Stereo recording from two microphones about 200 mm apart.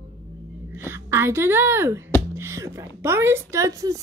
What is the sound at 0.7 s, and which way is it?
A woman's voice, 10° right (ahead or behind).